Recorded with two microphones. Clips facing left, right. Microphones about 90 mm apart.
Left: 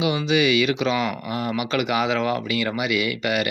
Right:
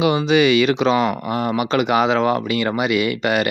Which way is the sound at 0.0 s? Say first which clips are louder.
Right 5 dB; 40° right (ahead or behind).